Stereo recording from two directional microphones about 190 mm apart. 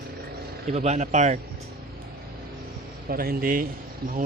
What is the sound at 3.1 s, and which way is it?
A man's voice, 50° right (ahead or behind).